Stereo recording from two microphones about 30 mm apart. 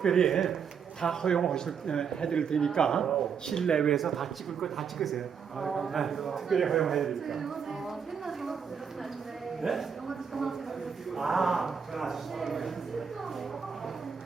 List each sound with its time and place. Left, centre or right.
0.0 s speech: centre
3.0 s speech: centre
3.9 s a man's voice: centre
9.6 s a man's voice: centre